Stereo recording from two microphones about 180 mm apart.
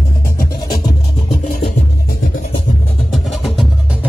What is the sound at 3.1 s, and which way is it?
Music, centre (ahead or behind).